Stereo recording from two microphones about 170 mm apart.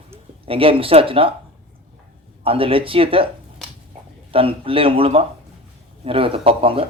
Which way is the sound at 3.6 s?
5° left (ahead or behind).